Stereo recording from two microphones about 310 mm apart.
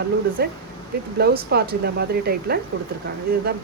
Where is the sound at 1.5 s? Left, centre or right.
Right.